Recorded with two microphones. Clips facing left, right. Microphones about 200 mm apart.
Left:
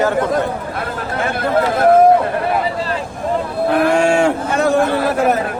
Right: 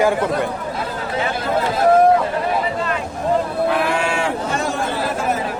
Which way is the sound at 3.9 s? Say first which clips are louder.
Left 7 dB; 45° left (ahead or behind).